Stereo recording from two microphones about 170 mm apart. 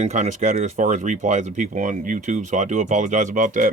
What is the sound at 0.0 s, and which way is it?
Speech, 45° right (ahead or behind).